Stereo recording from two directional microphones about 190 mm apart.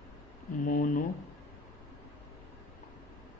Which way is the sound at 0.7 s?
45° left (ahead or behind).